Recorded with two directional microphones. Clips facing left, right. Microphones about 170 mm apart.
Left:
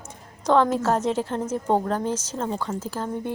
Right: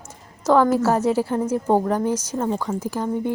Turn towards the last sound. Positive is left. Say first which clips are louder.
# right 5 dB
turn(degrees=-15)  # may be behind; listen again after turning